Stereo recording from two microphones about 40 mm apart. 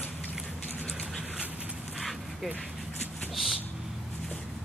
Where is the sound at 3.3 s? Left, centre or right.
Centre.